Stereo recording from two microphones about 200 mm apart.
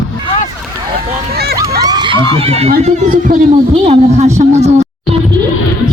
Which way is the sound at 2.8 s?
35° right (ahead or behind).